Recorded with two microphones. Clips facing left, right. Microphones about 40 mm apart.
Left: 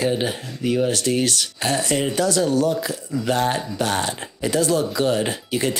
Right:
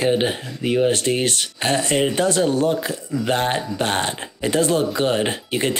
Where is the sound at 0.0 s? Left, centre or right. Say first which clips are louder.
Right 3 dB; right.